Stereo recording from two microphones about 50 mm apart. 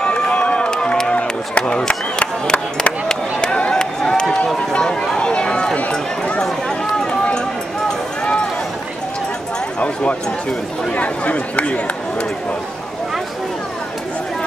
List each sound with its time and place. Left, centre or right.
0.0 s run: left
1.1 s a sound: left
5.9 s run: left
8.2 s run: centre
10.9 s speech: left